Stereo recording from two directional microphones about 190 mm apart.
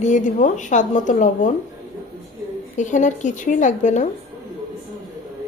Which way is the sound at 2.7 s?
40° left (ahead or behind).